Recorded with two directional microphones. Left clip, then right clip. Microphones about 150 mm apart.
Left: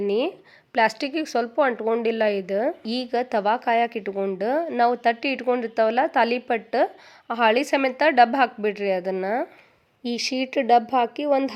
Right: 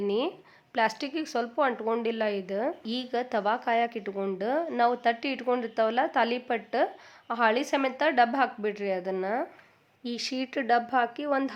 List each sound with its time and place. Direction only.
0.1 s a woman's voice: 30° left (ahead or behind)